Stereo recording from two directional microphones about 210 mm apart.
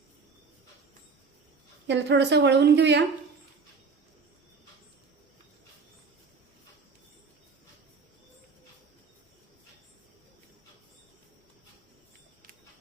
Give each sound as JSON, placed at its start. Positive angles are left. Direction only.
{"t": 1.9, "sound": "a woman's voice", "side_deg": -55}